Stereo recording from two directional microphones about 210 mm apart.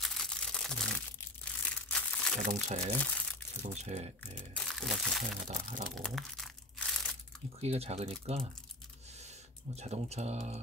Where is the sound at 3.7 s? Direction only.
35° right (ahead or behind).